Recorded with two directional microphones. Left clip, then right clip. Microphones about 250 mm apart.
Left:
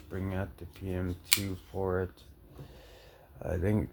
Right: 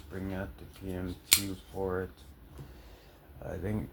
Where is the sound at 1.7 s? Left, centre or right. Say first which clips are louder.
Left 2 dB; left.